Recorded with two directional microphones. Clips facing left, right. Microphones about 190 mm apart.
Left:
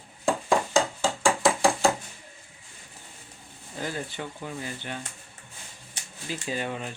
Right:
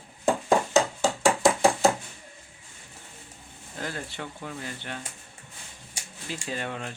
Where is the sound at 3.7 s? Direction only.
5° left (ahead or behind).